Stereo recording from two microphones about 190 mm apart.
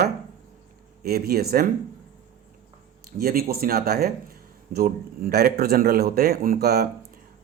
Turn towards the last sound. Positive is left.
turn(degrees=-55)  # may be behind; listen again after turning